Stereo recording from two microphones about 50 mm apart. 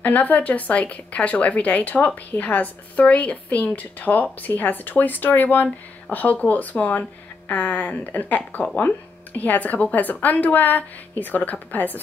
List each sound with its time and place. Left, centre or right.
0.0 s a woman's voice: left